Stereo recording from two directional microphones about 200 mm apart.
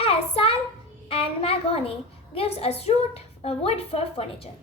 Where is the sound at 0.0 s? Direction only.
30° left (ahead or behind).